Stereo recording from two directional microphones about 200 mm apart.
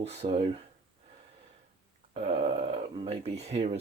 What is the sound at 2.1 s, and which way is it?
Speech, 30° right (ahead or behind).